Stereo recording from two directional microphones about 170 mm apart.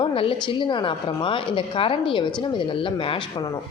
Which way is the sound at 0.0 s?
30° left (ahead or behind).